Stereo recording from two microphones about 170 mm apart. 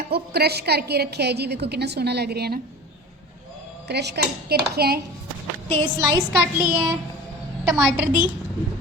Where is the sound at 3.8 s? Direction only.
80° right.